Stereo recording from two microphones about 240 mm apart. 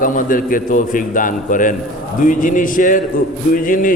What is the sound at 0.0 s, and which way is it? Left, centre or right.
A man's voice, left.